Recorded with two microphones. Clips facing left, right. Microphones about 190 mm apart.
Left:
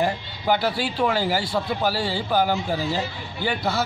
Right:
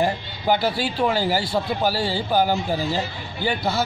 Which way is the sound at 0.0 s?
35° right (ahead or behind).